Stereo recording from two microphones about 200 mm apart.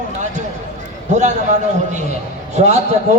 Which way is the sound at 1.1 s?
35° right (ahead or behind).